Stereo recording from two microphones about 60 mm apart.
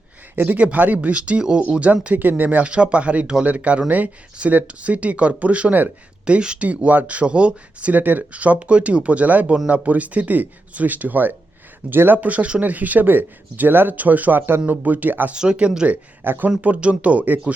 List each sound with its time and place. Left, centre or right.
0.3 s speech: right
15.3 s speech: centre
16.2 s speech: right
16.6 s speech: right